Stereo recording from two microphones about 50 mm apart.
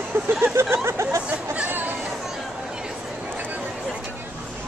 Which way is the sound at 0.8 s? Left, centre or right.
Right.